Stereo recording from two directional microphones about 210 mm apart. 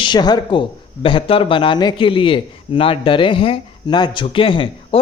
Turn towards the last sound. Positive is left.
turn(degrees=25)  # may be behind; listen again after turning